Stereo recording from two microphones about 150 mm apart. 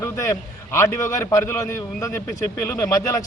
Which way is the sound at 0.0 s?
20° left (ahead or behind).